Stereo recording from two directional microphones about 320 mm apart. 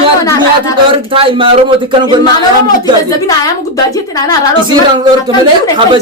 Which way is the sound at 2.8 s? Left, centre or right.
Centre.